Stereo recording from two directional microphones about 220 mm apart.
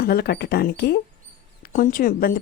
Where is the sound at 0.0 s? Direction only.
45° left (ahead or behind).